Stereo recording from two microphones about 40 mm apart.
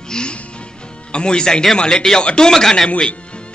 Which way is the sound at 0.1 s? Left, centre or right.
Left.